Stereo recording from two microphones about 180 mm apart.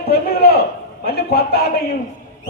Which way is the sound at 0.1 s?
60° left (ahead or behind).